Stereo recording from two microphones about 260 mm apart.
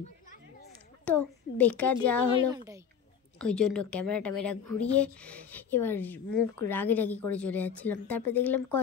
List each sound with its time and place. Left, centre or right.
1.0 s a woman's voice: centre
2.3 s a woman's voice: centre
3.3 s a woman's voice: centre